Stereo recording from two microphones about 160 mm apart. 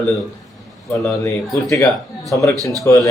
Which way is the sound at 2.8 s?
20° left (ahead or behind).